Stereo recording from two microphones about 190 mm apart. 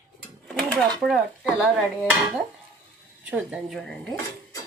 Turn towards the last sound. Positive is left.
turn(degrees=0)  # may be behind; listen again after turning